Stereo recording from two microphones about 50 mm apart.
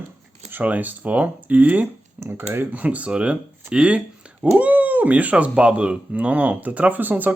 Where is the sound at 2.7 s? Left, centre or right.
Right.